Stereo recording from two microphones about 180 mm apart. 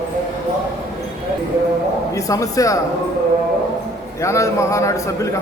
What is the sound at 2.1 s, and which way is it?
Speech, 20° left (ahead or behind).